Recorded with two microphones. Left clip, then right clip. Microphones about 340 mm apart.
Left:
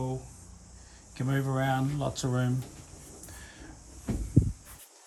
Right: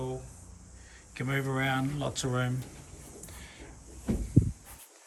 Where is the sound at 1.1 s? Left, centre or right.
Centre.